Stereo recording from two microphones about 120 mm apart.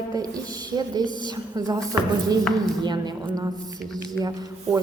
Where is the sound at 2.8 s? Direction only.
35° right (ahead or behind).